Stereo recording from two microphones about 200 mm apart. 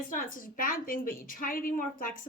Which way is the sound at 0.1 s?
40° left (ahead or behind).